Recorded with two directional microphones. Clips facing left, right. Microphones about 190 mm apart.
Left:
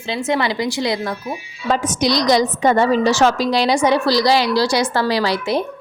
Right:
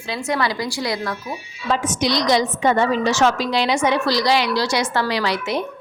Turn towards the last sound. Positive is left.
turn(degrees=35)  # may be behind; listen again after turning